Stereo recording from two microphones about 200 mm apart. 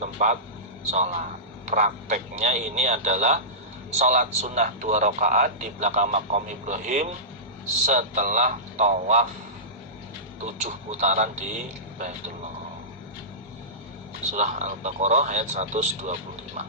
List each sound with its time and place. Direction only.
0.0 s a man's voice: 40° right (ahead or behind)
10.4 s a man's voice: 35° right (ahead or behind)
14.3 s a man's voice: 35° right (ahead or behind)